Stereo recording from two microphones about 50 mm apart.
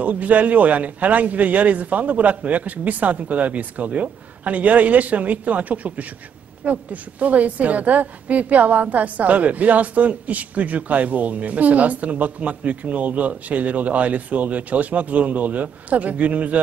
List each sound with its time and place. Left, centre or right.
0.0 s a woman's voice: right